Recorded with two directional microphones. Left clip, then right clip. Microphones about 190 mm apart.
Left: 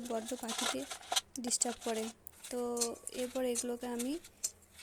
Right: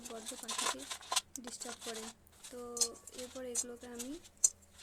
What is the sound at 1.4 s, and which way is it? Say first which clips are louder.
Speech: left 10 dB; 35° left (ahead or behind).